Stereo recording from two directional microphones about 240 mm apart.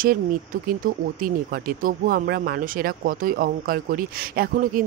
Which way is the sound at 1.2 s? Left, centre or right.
Right.